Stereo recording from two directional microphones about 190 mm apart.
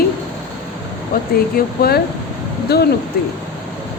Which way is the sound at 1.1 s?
50° left (ahead or behind).